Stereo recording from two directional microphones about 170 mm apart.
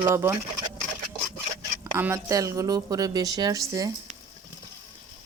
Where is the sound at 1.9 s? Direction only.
15° right (ahead or behind).